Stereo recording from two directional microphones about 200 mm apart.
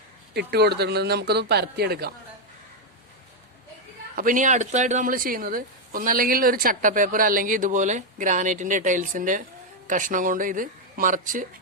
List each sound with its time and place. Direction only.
0.3 s speech: 55° right (ahead or behind)
4.1 s speech: 45° right (ahead or behind)